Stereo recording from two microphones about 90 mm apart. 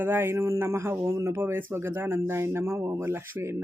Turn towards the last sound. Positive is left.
turn(degrees=-30)  # may be behind; listen again after turning